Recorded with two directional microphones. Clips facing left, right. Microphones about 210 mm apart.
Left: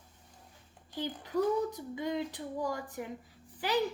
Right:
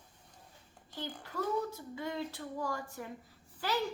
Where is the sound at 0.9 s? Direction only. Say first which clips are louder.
Left 7 dB; 15° left (ahead or behind).